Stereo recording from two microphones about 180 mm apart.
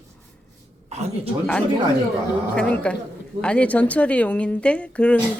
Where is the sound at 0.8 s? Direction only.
35° right (ahead or behind).